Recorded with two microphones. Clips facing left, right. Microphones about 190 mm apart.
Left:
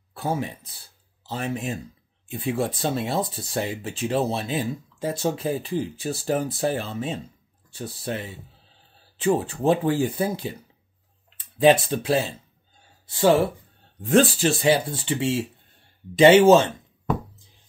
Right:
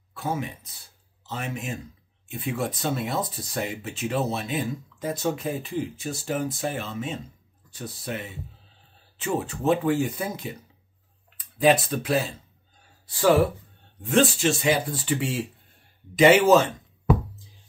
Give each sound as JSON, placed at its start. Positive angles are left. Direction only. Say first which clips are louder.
{"t": 0.1, "sound": "speech", "louder": "left 2 dB", "side_deg": 35}
{"t": 14.0, "sound": "speech", "louder": "left 2 dB", "side_deg": 35}